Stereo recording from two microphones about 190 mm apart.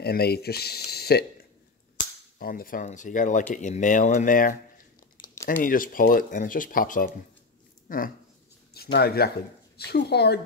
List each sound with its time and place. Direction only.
0.0 s speech: 55° left (ahead or behind)
2.3 s speech: 50° left (ahead or behind)
8.9 s speech: 55° left (ahead or behind)